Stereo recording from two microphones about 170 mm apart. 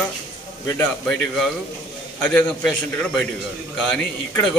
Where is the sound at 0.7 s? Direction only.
5° left (ahead or behind).